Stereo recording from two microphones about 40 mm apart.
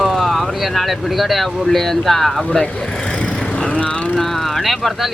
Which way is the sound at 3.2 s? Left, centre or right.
Left.